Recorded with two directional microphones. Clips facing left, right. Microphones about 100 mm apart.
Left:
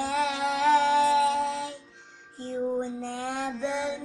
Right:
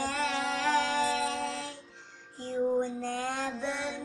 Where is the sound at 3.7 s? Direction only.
15° left (ahead or behind).